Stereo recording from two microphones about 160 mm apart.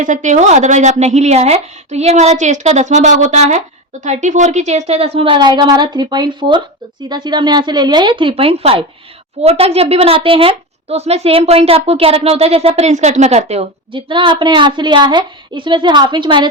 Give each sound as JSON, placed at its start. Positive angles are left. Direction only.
{"t": 0.0, "sound": "a woman's voice", "side_deg": -50}